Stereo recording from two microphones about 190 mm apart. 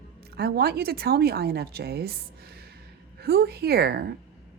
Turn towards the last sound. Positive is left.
turn(degrees=-55)  # may be behind; listen again after turning